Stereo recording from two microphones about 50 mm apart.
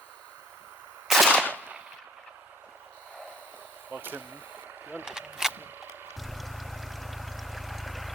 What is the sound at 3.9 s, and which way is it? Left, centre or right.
Speech, right.